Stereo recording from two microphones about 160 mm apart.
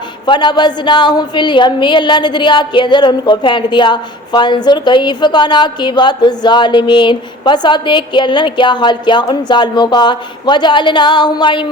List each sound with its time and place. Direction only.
0.3 s a woman's voice: 30° left (ahead or behind)